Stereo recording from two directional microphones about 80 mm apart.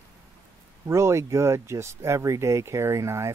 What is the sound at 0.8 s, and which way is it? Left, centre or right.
Speech, right.